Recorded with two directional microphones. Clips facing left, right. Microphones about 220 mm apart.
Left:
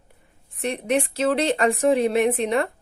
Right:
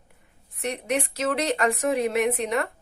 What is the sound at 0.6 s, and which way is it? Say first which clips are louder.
Speech: left 4 dB; 30° left (ahead or behind).